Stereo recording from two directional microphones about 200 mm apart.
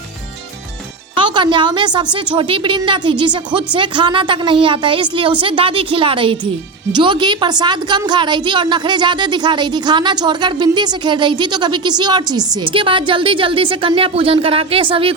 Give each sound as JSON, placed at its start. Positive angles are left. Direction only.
{"t": 1.1, "sound": "speech", "side_deg": -25}